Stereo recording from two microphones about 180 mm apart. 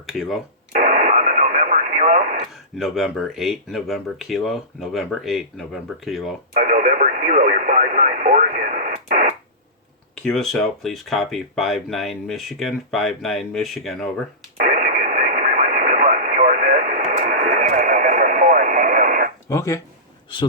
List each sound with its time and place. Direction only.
0.0 s speech: centre (ahead or behind)
0.7 s radio: 45° right (ahead or behind)
2.7 s speech: centre (ahead or behind)
6.5 s radio: 45° right (ahead or behind)
10.2 s speech: centre (ahead or behind)
14.6 s radio: 50° right (ahead or behind)
19.5 s speech: 15° left (ahead or behind)